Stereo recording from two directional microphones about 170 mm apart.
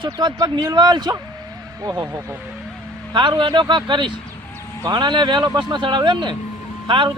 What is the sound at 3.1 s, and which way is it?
Speech, 30° right (ahead or behind).